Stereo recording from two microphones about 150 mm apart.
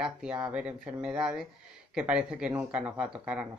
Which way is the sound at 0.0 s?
5° right (ahead or behind).